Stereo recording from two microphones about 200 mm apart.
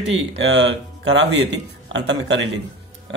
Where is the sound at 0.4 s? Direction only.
60° right (ahead or behind).